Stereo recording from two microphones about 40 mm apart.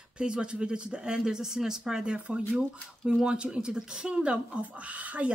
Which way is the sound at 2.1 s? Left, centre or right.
Right.